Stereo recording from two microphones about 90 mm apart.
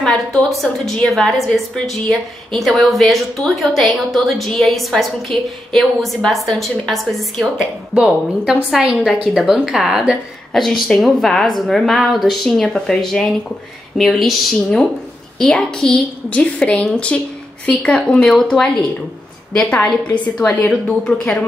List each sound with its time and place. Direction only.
0.0 s a woman's voice: 10° left (ahead or behind)